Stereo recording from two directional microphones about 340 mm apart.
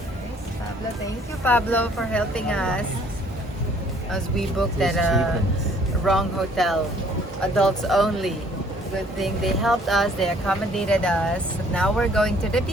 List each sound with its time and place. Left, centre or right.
1.5 s speech: centre
4.1 s speech: centre